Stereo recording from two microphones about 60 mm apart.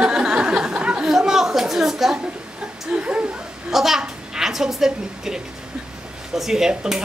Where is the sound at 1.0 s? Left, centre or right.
Centre.